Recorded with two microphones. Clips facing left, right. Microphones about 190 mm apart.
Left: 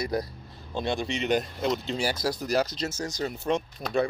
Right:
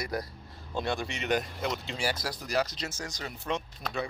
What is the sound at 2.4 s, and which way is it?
Speech, 35° left (ahead or behind).